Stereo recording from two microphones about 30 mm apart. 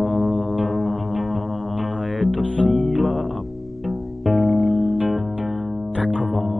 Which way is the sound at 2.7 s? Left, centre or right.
Centre.